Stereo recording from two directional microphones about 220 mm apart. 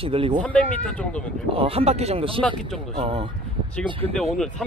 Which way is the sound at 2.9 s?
25° right (ahead or behind).